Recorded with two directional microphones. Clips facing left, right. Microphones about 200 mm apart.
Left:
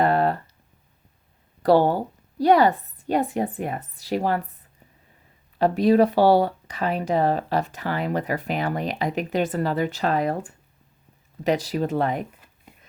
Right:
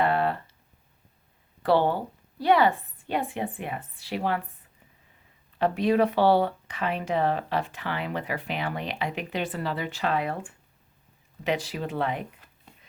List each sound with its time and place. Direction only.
0.0 s a sound: 40° left (ahead or behind)
1.6 s speech: 40° left (ahead or behind)
5.5 s speech: 40° left (ahead or behind)